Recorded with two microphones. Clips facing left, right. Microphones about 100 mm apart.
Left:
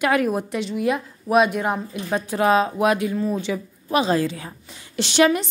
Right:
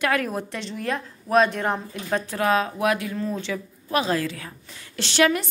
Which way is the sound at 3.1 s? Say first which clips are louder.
Left 4 dB; 10° left (ahead or behind).